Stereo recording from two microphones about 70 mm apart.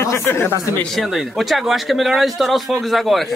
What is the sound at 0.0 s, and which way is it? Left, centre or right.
Speech, left.